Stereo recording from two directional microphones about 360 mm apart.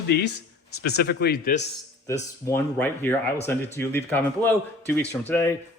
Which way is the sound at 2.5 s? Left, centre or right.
Centre.